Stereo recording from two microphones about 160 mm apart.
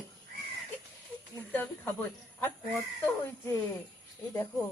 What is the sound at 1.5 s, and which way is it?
Speech, 10° left (ahead or behind).